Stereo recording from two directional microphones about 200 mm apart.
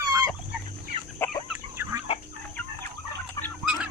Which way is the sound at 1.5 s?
10° right (ahead or behind).